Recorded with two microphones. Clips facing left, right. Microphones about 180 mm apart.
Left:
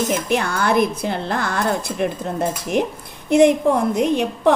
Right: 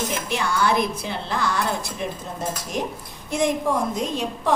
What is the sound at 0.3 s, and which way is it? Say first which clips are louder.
A woman's voice: left 3 dB; 55° left (ahead or behind).